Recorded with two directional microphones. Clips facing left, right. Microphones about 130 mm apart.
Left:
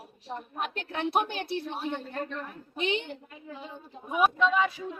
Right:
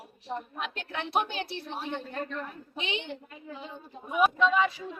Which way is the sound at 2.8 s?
45° left (ahead or behind).